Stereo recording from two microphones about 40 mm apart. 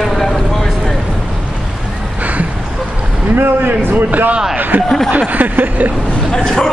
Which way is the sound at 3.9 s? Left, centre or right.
Right.